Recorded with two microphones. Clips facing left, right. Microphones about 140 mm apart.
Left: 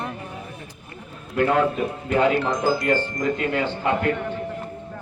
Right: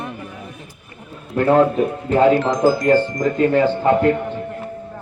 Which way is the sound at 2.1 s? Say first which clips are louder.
Right 5 dB; 40° right (ahead or behind).